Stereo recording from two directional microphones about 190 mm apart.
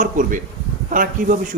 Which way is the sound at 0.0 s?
45° right (ahead or behind).